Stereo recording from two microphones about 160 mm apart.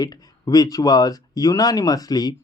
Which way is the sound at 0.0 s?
25° left (ahead or behind).